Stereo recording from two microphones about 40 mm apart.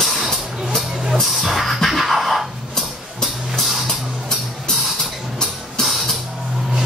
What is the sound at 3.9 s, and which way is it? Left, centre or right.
Music, centre.